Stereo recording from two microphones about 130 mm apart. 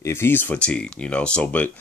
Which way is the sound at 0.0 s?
20° left (ahead or behind).